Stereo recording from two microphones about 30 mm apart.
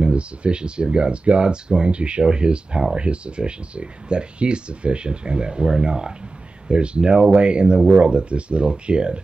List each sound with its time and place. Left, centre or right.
0.0 s speech: right